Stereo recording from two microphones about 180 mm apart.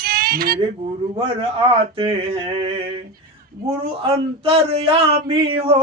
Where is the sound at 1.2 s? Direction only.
30° right (ahead or behind).